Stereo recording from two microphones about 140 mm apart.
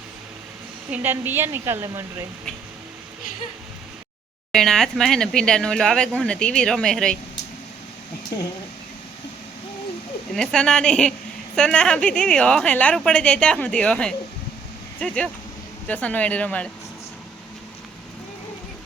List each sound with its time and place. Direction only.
0.9 s a woman's voice: 15° right (ahead or behind)
4.5 s speech: 5° left (ahead or behind)
10.3 s speech: 5° left (ahead or behind)